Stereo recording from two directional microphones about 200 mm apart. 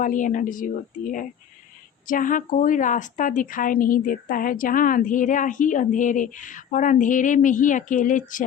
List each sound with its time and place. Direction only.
0.0 s a woman's voice: 40° left (ahead or behind)